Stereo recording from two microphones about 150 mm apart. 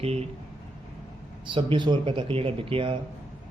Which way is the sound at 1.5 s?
35° right (ahead or behind).